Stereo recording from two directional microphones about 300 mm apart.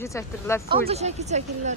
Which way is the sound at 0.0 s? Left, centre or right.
Centre.